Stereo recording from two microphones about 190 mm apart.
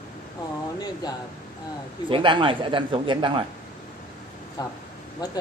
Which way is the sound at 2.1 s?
25° right (ahead or behind).